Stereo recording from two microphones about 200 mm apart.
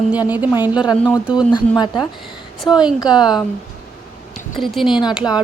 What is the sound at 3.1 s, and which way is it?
Speech, 20° left (ahead or behind).